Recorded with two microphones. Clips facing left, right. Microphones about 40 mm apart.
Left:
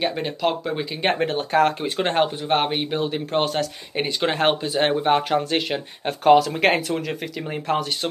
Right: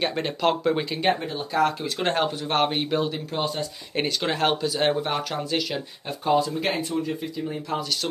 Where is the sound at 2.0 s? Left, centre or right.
Left.